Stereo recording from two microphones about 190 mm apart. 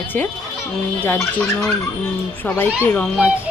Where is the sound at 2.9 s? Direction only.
5° left (ahead or behind).